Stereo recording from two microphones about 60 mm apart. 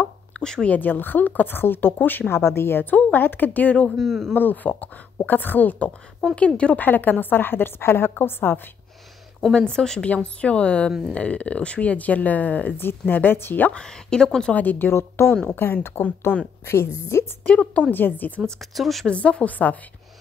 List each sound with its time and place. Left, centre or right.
0.3 s speech: centre
0.7 s a woman's voice: left
3.9 s speech: centre
4.4 s a woman's voice: left
6.9 s a woman's voice: left
9.5 s a woman's voice: centre; by 13.7 s left
13.7 s a woman's voice: centre
14.5 s speech: left
14.9 s a woman's voice: left
16.0 s speech: left
16.6 s a woman's voice: left
17.9 s a woman's voice: left
18.8 s speech: centre
19.0 s speech: left